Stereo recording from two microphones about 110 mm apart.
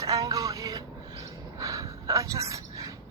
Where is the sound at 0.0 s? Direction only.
35° right (ahead or behind).